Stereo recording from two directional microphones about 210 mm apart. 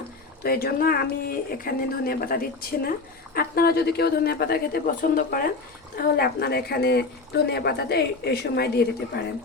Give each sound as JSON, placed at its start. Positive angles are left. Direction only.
{"t": 0.4, "sound": "speech", "side_deg": 45}